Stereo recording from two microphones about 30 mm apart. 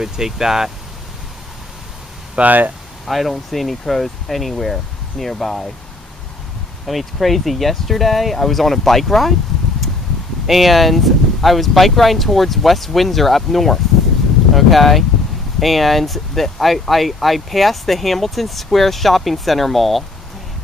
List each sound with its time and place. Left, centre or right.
0.0 s speech: centre
2.4 s speech: right
3.1 s speech: centre
6.9 s speech: centre
10.4 s speech: centre